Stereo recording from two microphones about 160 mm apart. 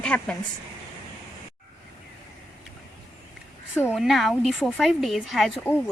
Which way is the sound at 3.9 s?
Centre (ahead or behind).